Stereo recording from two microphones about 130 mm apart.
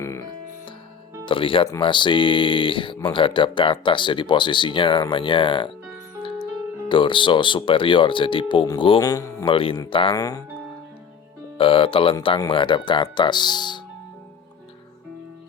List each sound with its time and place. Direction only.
0.0 s music: 20° left (ahead or behind)
1.2 s speech: 40° left (ahead or behind)
6.8 s speech: 40° left (ahead or behind)
9.0 s a man's voice: 25° left (ahead or behind)
9.4 s speech: 45° left (ahead or behind)
10.2 s a man's voice: 30° left (ahead or behind)
11.5 s speech: 45° left (ahead or behind)